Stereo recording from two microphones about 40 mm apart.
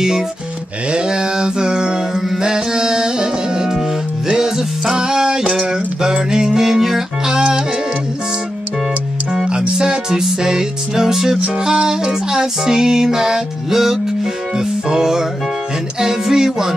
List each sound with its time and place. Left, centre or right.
0.9 s mantra: centre
2.1 s music: centre
2.4 s music: centre
9.5 s music: centre